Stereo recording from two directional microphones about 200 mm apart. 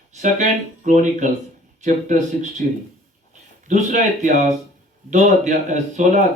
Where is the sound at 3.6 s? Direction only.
40° right (ahead or behind).